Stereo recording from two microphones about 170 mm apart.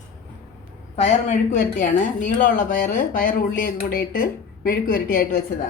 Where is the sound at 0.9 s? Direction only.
45° left (ahead or behind); by 5.4 s 60° left (ahead or behind).